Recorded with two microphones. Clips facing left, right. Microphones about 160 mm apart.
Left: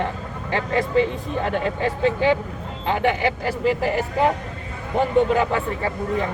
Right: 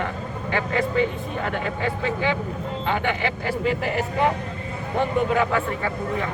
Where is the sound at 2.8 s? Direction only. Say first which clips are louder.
Left 5 dB; 35° left (ahead or behind).